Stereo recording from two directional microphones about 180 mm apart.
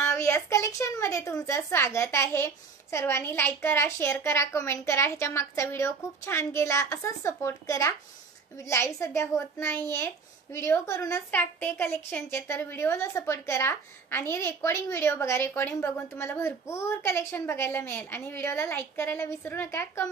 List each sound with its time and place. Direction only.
0.0 s a child's voice: 15° left (ahead or behind)